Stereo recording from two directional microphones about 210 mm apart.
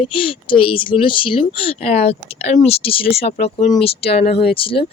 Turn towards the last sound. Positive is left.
turn(degrees=25)  # may be behind; listen again after turning